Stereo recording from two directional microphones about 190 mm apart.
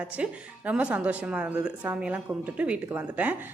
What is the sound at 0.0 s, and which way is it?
A woman's voice, 5° right (ahead or behind).